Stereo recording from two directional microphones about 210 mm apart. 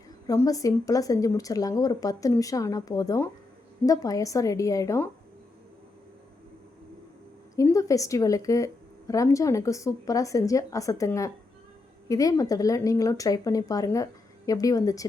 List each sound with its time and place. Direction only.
0.3 s speech: 15° left (ahead or behind)
7.5 s speech: 15° left (ahead or behind)